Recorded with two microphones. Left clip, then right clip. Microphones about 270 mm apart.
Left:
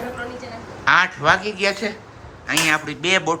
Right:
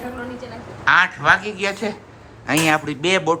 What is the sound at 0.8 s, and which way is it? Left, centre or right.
Speech, centre.